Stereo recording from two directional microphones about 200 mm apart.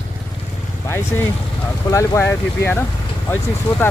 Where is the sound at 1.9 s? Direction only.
15° left (ahead or behind).